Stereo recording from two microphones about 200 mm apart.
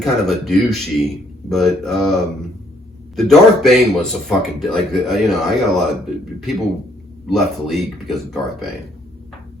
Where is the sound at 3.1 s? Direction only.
Centre (ahead or behind).